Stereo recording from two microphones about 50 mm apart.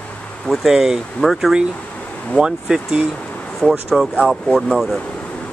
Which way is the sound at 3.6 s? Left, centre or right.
Centre.